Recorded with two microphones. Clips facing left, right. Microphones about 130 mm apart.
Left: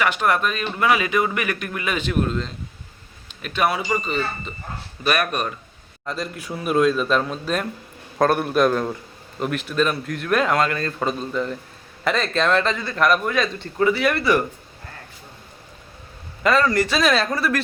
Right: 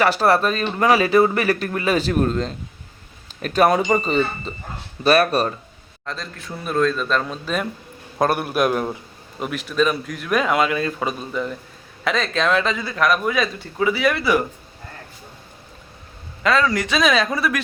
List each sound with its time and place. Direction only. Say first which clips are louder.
0.0 s speech: right 4 dB; 35° right (ahead or behind)
6.1 s a man's voice: left 3 dB; 10° left (ahead or behind); by 9.0 s 10° right (ahead or behind)
9.4 s a man's voice: right 1 dB; centre (ahead or behind)
16.4 s a man's voice: left 1 dB; centre (ahead or behind)